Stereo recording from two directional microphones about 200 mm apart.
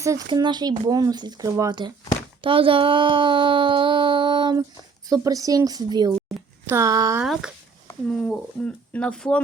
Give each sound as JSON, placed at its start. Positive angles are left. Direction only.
{"t": 0.0, "sound": "speech", "side_deg": -15}
{"t": 7.2, "sound": "speech", "side_deg": -5}